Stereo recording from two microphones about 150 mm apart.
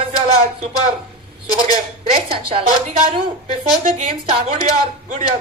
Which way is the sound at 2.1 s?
40° right (ahead or behind).